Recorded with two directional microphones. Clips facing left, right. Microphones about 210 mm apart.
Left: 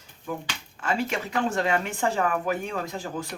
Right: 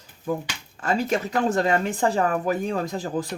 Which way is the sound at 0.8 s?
40° right (ahead or behind).